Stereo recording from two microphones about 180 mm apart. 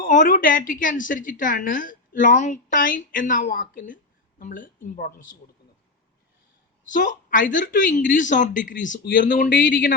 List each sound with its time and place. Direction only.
0.0 s a woman's voice: 50° left (ahead or behind)
6.9 s a woman's voice: 45° left (ahead or behind)
9.0 s a man's voice: 65° left (ahead or behind)
9.3 s a man's voice: 55° left (ahead or behind)